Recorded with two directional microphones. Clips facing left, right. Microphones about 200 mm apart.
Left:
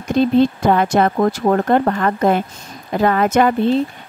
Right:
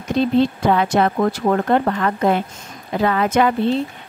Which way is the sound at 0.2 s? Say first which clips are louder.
Left 3 dB; 45° left (ahead or behind).